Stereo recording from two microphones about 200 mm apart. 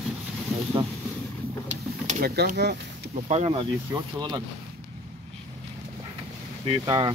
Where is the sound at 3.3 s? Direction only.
30° right (ahead or behind).